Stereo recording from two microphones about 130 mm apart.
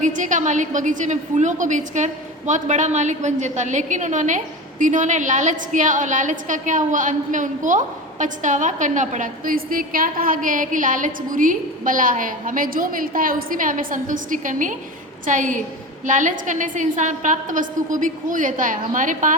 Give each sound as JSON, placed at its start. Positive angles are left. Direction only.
{"t": 0.0, "sound": "a woman's voice", "side_deg": -75}